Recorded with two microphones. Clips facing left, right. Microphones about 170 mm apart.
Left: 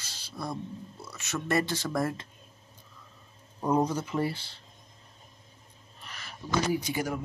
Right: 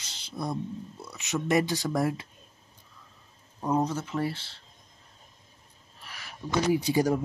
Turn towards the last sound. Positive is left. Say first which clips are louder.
# right 6 dB
turn(degrees=-35)  # may be behind; listen again after turning